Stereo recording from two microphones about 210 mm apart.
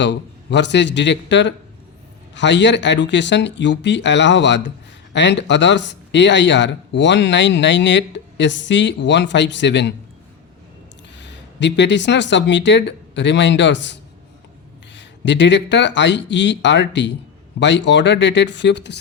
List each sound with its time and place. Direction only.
0.0 s speech: 55° left (ahead or behind)
11.2 s speech: 55° left (ahead or behind)